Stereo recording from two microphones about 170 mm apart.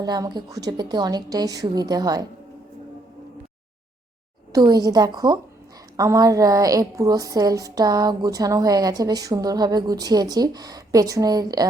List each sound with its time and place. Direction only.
0.0 s a woman's voice: 25° right (ahead or behind)
4.5 s a woman's voice: 20° right (ahead or behind)